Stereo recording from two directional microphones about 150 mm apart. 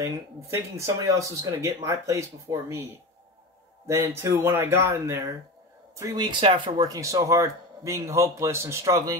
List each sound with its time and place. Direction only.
0.0 s speech: 20° right (ahead or behind)
3.8 s a man's voice: 15° right (ahead or behind)